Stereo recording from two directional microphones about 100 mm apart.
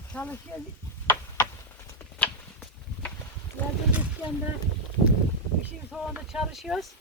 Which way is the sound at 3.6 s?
20° left (ahead or behind).